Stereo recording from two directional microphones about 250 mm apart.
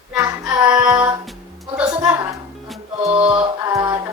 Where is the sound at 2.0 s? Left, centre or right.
Centre.